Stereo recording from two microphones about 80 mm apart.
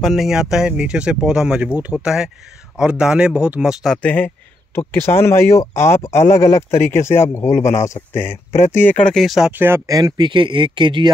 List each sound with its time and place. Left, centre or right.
0.0 s speech: centre
4.0 s speech: left
4.7 s speech: left
9.0 s speech: centre
9.5 s speech: right
9.8 s speech: right
10.2 s speech: right